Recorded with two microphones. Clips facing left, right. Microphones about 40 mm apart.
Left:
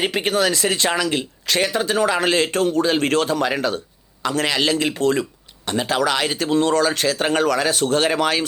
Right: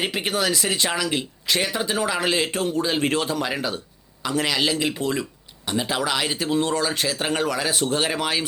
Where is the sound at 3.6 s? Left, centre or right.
Left.